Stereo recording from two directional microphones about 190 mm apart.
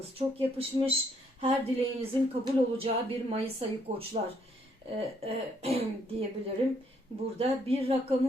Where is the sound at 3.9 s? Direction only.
35° right (ahead or behind).